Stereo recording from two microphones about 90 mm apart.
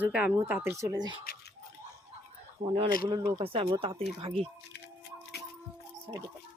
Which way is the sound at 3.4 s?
75° right (ahead or behind).